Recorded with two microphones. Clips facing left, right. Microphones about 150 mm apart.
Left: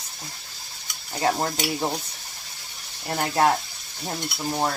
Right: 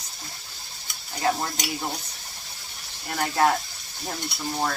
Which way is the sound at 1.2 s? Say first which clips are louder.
Left 2 dB; 30° left (ahead or behind).